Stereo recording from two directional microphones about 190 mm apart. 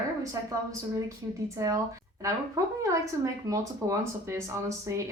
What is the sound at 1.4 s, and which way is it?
Speech, 15° right (ahead or behind).